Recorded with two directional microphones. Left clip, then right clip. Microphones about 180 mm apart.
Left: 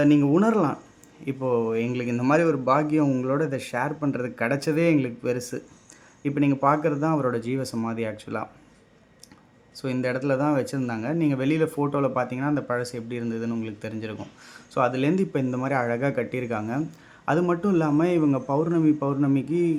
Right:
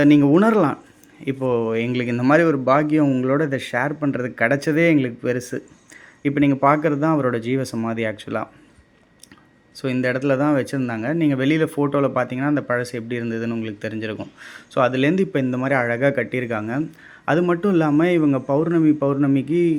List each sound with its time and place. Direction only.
0.0 s speech: 20° right (ahead or behind)
9.7 s speech: 10° right (ahead or behind)